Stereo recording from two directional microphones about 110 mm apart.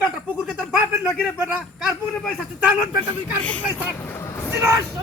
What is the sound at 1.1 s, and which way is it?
Speech, 10° right (ahead or behind).